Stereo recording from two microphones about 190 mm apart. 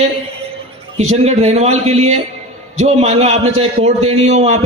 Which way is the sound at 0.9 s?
35° right (ahead or behind).